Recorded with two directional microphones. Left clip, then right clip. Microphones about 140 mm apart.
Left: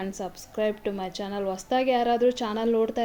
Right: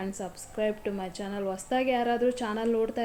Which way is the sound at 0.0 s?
50° left (ahead or behind).